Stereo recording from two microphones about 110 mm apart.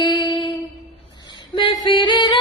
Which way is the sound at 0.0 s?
45° left (ahead or behind).